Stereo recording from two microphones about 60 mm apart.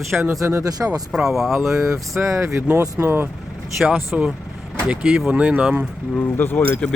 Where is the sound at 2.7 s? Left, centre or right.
Right.